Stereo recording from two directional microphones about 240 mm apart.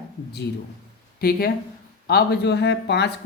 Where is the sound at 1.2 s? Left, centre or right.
Left.